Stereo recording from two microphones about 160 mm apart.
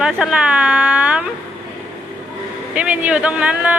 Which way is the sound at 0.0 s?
5° right (ahead or behind).